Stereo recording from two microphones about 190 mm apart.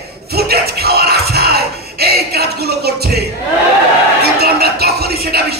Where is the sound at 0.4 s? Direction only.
55° right (ahead or behind).